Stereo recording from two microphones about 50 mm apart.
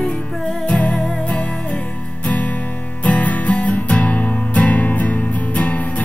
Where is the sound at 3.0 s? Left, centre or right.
Left.